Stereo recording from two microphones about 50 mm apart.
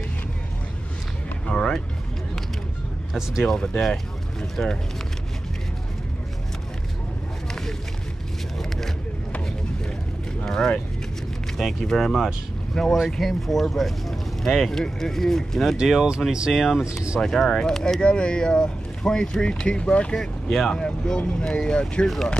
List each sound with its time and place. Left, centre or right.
1.5 s music: centre
3.1 s speech: centre
3.4 s speech: centre
8.5 s vehicle: centre
10.4 s vehicle: centre
11.8 s speech: centre
15.8 s speech: centre
17.2 s speech: centre
20.4 s speech: centre
22.0 s speech: centre